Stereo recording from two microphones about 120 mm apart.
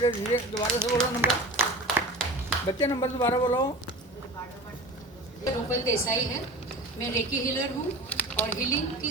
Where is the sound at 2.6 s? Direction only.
30° left (ahead or behind).